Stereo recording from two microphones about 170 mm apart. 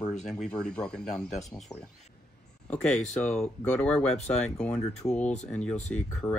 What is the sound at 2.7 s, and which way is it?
Speech, 5° left (ahead or behind).